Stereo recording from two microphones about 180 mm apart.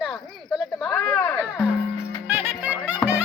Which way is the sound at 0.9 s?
10° left (ahead or behind).